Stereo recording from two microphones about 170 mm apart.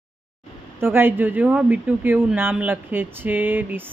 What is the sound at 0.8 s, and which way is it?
Speech, 10° right (ahead or behind).